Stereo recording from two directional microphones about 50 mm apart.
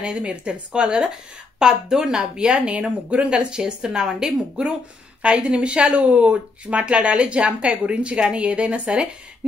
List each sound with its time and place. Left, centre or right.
0.0 s a woman's voice: right